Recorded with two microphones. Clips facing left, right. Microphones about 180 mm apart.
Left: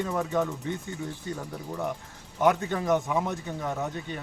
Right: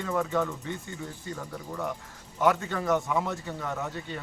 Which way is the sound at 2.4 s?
20° left (ahead or behind).